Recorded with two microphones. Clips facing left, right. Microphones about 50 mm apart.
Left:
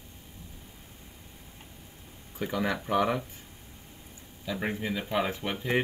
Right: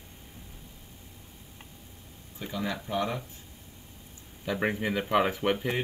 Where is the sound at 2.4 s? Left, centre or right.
Left.